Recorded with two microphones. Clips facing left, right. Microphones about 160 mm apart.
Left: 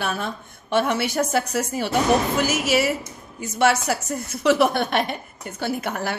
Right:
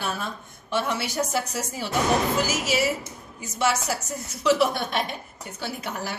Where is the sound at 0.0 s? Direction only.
60° left (ahead or behind).